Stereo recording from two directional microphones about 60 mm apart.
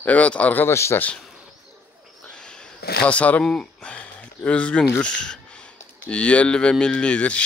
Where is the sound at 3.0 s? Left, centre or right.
Left.